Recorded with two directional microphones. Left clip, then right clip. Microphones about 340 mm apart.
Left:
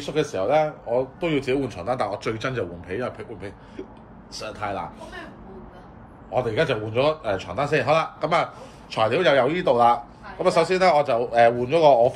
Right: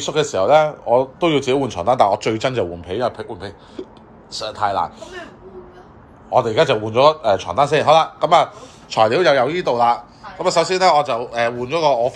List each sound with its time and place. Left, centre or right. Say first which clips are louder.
0.0 s a man's voice: right 6 dB; centre
4.4 s a man's voice: right 10 dB; centre
6.3 s a man's voice: right 8 dB; centre